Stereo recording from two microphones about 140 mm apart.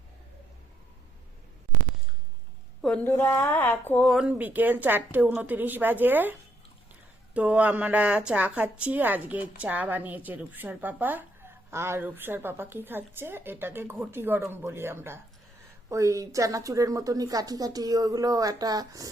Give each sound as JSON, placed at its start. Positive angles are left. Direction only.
{"t": 3.0, "sound": "speech", "side_deg": 20}
{"t": 4.0, "sound": "a woman's voice", "side_deg": -5}
{"t": 7.3, "sound": "a woman's voice", "side_deg": -10}